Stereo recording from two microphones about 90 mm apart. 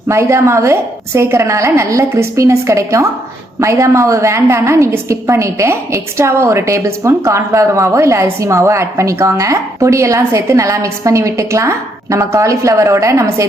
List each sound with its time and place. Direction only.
0.1 s a woman's voice: 30° right (ahead or behind)